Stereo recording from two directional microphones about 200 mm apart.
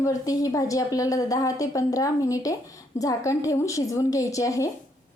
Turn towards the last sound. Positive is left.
turn(degrees=15)  # may be behind; listen again after turning